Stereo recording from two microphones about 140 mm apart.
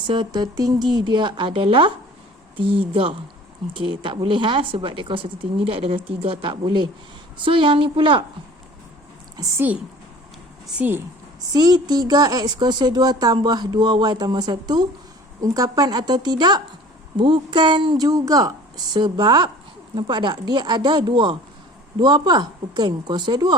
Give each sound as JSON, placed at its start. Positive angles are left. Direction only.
{"t": 0.1, "sound": "a woman's voice", "side_deg": -30}
{"t": 3.8, "sound": "a woman's voice", "side_deg": -35}
{"t": 9.4, "sound": "a woman's voice", "side_deg": -15}
{"t": 11.5, "sound": "a woman's voice", "side_deg": -30}